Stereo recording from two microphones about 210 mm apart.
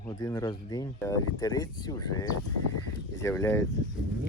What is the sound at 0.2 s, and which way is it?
Speech, 15° left (ahead or behind).